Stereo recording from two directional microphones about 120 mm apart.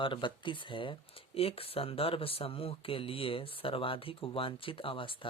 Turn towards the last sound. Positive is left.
turn(degrees=45)  # may be behind; listen again after turning